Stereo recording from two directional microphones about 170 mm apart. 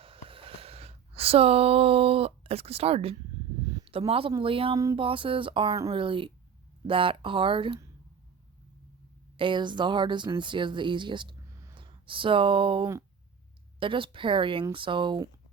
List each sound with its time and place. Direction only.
0.0 s a sound: 35° right (ahead or behind)
3.7 s speech: 30° right (ahead or behind)
9.4 s speech: 30° right (ahead or behind)